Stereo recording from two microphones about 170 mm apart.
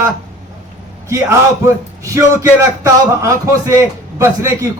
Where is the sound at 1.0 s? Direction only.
15° right (ahead or behind).